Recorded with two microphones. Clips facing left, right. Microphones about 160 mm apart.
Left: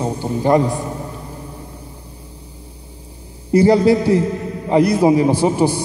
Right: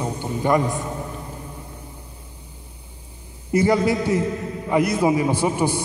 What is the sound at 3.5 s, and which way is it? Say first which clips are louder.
A man's voice: left 6 dB; 35° left (ahead or behind).